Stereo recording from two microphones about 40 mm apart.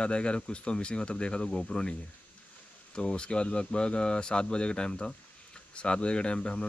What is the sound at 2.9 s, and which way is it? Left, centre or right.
Speech, left.